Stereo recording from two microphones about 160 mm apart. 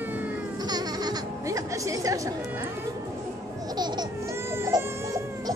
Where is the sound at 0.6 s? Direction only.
25° right (ahead or behind).